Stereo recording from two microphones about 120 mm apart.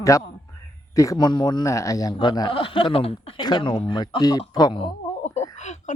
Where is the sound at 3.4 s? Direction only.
40° left (ahead or behind).